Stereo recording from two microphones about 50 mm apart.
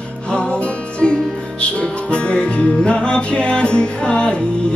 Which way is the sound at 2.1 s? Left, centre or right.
Left.